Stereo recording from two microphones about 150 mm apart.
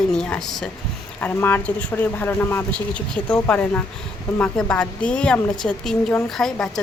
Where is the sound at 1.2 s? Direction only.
15° left (ahead or behind).